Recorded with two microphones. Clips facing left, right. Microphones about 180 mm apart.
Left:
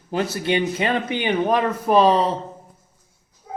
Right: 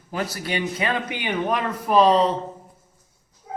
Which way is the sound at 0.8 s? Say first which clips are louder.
Left 4 dB; 30° left (ahead or behind).